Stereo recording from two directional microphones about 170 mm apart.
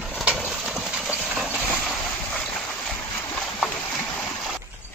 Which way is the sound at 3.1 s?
15° left (ahead or behind).